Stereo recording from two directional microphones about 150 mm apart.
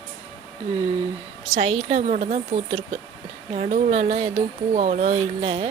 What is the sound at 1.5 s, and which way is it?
Speech, 45° right (ahead or behind).